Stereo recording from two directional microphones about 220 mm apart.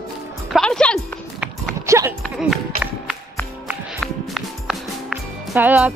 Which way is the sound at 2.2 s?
Centre (ahead or behind).